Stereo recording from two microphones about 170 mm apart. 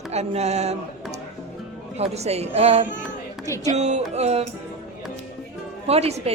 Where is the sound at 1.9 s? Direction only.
40° right (ahead or behind).